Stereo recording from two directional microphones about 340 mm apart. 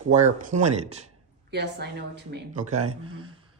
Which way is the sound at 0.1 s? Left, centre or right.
Right.